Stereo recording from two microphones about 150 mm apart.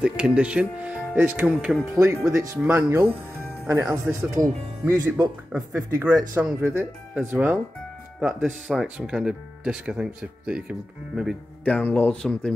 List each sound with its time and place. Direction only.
0.0 s speech: 5° right (ahead or behind)
1.5 s speech: 5° left (ahead or behind)
2.0 s speech: 20° right (ahead or behind)
8.6 s speech: 5° right (ahead or behind)
11.6 s speech: 10° left (ahead or behind)